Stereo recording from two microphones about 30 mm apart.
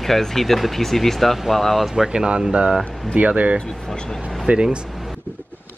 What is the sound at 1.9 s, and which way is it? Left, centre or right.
Speech, right.